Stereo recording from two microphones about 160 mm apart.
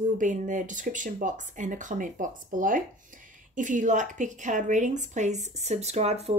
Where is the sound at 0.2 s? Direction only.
55° right (ahead or behind).